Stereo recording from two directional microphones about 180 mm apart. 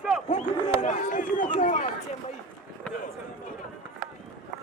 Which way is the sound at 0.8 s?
45° left (ahead or behind).